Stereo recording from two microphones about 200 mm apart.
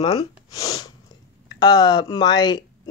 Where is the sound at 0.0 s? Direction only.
20° left (ahead or behind).